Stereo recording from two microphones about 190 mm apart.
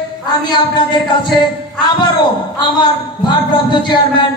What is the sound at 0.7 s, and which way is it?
Speech, 25° left (ahead or behind).